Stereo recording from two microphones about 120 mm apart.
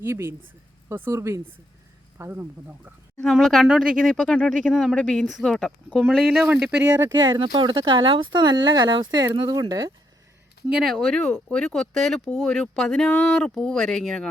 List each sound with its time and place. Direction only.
0.0 s speech: 20° right (ahead or behind)
3.2 s speech: 5° left (ahead or behind)
7.2 s speech: 35° right (ahead or behind)
10.7 s speech: 5° right (ahead or behind)